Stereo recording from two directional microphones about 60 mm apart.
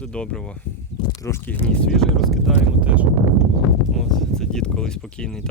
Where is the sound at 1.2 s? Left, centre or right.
Left.